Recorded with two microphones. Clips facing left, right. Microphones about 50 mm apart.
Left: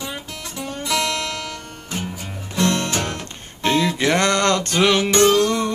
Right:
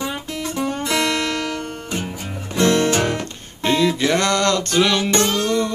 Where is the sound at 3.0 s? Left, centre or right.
Centre.